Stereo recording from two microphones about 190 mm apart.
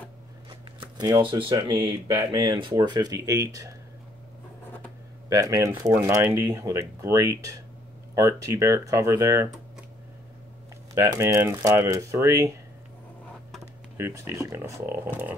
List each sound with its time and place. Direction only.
0.5 s shuffling cards: 25° right (ahead or behind)
1.7 s speech: 15° right (ahead or behind)
5.3 s speech: 20° right (ahead or behind)
11.0 s speech: 15° right (ahead or behind)
13.9 s speech: 15° right (ahead or behind)